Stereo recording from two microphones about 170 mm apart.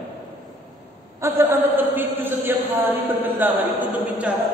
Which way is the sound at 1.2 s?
15° right (ahead or behind).